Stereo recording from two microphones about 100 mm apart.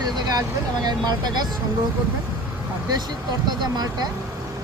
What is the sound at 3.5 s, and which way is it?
Speech, 45° right (ahead or behind).